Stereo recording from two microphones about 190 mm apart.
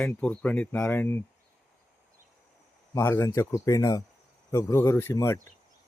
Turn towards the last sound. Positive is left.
turn(degrees=15)  # may be behind; listen again after turning